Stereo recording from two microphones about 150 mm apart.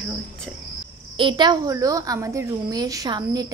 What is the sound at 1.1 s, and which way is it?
A woman's voice, 30° right (ahead or behind).